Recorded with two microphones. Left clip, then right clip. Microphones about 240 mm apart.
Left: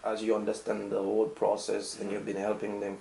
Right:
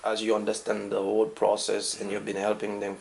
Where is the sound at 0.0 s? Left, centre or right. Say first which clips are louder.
Right 3 dB; centre.